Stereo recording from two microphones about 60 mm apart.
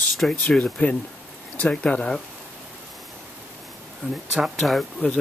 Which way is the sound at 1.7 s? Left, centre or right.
Centre.